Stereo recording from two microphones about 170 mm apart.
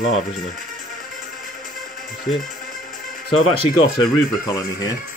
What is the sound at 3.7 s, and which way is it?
Speech, 25° left (ahead or behind).